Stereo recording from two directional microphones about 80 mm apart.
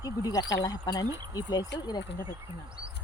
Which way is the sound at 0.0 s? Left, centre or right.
Left.